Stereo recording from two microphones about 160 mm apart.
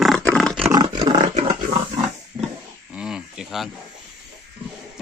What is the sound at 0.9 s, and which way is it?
Roaring cats, 35° right (ahead or behind).